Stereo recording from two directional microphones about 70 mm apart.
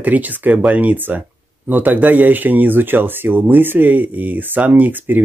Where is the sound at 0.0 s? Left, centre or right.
Right.